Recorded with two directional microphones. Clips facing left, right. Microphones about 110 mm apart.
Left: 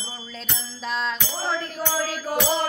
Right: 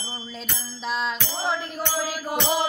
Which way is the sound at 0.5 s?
5° right (ahead or behind).